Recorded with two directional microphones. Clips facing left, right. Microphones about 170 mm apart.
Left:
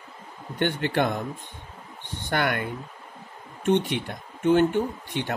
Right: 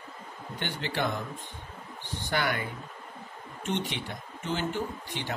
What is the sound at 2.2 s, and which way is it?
Speech, 55° left (ahead or behind).